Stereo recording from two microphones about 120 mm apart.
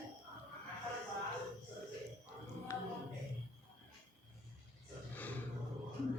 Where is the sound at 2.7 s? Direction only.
20° left (ahead or behind).